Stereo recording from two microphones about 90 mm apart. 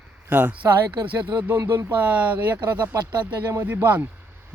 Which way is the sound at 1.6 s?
35° right (ahead or behind).